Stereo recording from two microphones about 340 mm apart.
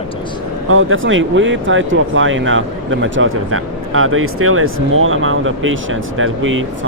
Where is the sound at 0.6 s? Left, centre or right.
Right.